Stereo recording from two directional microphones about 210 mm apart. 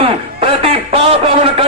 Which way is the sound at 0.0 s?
25° right (ahead or behind).